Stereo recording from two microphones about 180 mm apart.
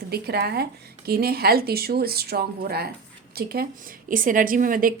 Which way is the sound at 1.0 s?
60° right (ahead or behind).